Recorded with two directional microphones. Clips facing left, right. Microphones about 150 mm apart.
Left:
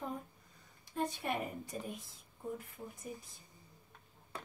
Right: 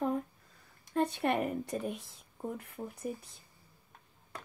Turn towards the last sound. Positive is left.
turn(degrees=-70)  # may be behind; listen again after turning